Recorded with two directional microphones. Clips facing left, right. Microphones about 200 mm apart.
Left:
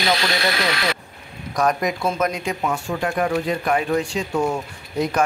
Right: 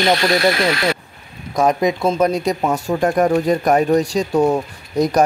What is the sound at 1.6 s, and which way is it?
Speech, 25° right (ahead or behind).